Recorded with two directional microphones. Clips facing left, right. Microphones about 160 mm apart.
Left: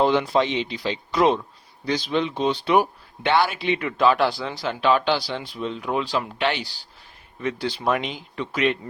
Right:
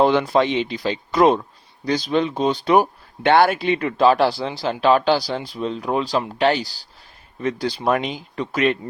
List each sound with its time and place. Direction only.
0.0 s speech: 55° right (ahead or behind)